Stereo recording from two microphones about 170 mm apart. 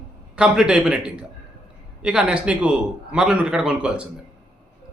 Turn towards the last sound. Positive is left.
turn(degrees=-5)  # may be behind; listen again after turning